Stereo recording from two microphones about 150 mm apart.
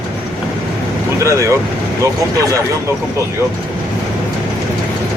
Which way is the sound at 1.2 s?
20° right (ahead or behind).